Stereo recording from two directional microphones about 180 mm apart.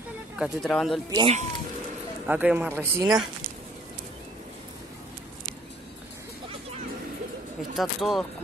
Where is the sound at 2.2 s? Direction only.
10° right (ahead or behind).